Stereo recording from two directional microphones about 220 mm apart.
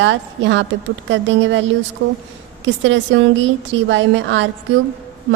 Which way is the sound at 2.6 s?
60° right (ahead or behind).